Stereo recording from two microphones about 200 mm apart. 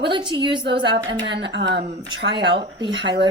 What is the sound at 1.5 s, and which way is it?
Speech, 60° right (ahead or behind).